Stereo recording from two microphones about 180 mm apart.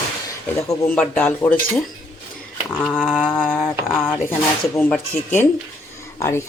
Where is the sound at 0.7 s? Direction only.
5° left (ahead or behind).